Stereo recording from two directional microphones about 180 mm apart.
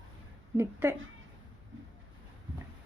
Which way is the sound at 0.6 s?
15° right (ahead or behind).